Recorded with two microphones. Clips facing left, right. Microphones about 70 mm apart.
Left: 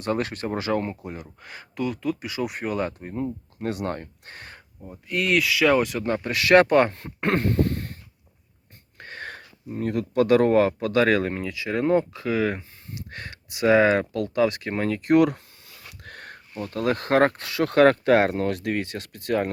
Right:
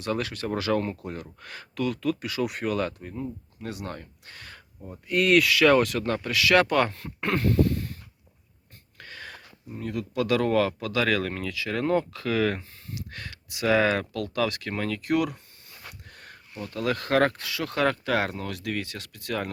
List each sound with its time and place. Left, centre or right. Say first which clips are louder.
0.0 s speech: left 3 dB; left
3.6 s speech: left 8 dB; left
4.8 s speech: right 2 dB; centre; by 6.3 s left
6.3 s speech: left 5 dB; left
7.7 s a sound: even; left
9.0 s a sound: left 5 dB; left
9.6 s speech: left 6 dB; left; by 12.6 s centre
12.9 s speech: left 1 dB; left
15.1 s speech: left 7 dB; left
16.0 s a sound: left 7 dB; left
16.6 s speech: left 3 dB; left